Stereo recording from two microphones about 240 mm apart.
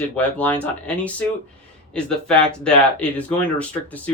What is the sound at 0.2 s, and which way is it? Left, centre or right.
Speech, centre.